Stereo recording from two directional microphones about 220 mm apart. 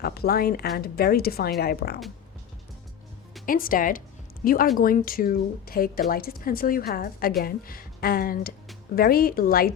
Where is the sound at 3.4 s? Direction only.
40° left (ahead or behind).